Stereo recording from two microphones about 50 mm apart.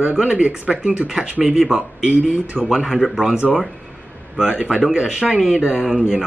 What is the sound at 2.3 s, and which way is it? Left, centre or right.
Speech, right.